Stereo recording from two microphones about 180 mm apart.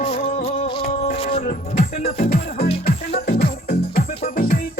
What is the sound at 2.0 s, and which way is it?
Music, 35° left (ahead or behind).